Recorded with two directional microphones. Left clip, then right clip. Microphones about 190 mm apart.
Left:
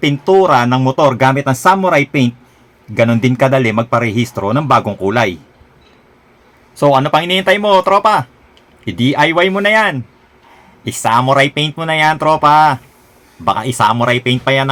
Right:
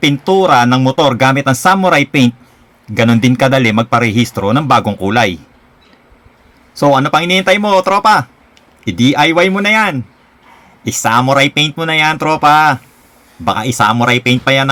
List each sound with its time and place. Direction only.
0.0 s speech: 30° right (ahead or behind)
6.7 s speech: 15° right (ahead or behind)